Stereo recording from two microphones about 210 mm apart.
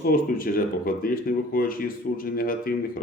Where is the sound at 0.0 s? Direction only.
45° left (ahead or behind).